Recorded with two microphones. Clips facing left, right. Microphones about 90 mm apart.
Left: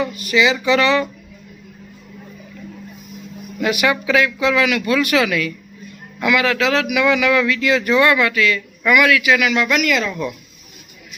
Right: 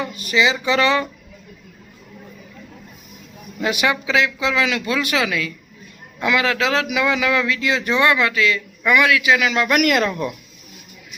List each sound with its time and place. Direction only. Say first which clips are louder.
0.0 s a man's voice: left 2 dB; 30° right (ahead or behind)
3.6 s a man's voice: left 2 dB; 25° right (ahead or behind)
9.6 s speech: right 1 dB; 50° right (ahead or behind)